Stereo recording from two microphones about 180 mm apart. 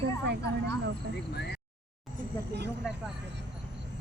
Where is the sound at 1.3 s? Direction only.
65° left (ahead or behind).